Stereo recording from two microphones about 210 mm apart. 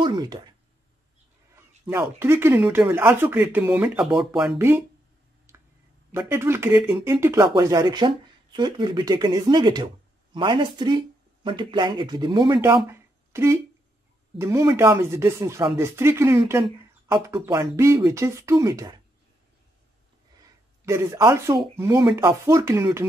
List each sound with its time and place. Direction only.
0.0 s speech: 20° right (ahead or behind)
1.9 s speech: 10° right (ahead or behind)
5.5 s finger snapping: 15° right (ahead or behind)
6.1 s speech: 10° right (ahead or behind)
20.8 s speech: 15° right (ahead or behind)